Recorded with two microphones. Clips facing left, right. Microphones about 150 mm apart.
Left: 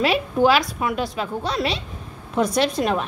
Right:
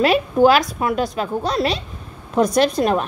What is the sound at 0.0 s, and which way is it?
A woman's voice, 45° right (ahead or behind).